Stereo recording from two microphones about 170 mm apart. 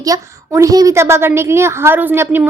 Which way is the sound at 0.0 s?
20° right (ahead or behind).